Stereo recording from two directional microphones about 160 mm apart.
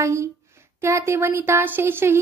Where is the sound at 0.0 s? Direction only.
15° right (ahead or behind).